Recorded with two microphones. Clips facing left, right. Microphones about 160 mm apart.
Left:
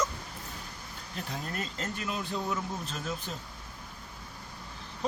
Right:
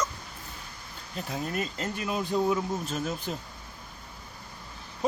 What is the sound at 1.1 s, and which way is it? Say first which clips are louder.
Speech: right 5 dB; 5° right (ahead or behind).